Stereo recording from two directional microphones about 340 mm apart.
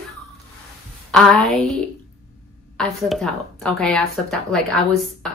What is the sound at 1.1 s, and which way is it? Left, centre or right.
Speech, centre.